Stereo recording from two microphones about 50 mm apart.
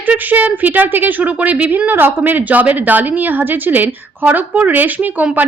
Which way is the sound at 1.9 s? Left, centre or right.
Right.